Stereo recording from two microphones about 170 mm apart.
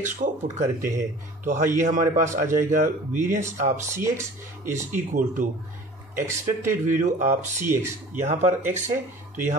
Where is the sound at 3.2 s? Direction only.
15° right (ahead or behind).